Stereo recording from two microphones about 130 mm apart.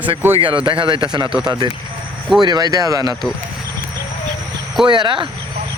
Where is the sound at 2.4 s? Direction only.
30° right (ahead or behind).